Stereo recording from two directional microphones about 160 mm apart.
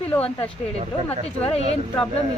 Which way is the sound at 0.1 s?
10° left (ahead or behind).